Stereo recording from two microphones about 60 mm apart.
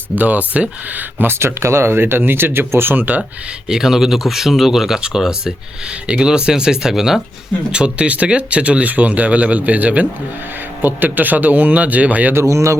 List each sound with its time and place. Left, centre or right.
0.2 s speech: right
1.2 s speech: right
3.7 s speech: centre
7.7 s speech: centre
12.3 s speech: right